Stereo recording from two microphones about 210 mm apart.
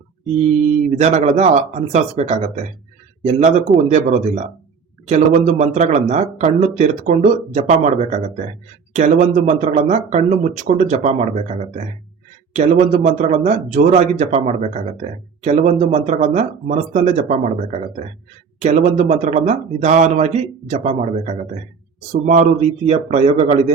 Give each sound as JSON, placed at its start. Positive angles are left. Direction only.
{"t": 0.9, "sound": "speech", "side_deg": -30}